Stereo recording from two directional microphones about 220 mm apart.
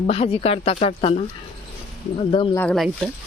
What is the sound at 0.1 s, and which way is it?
Speech, 25° left (ahead or behind).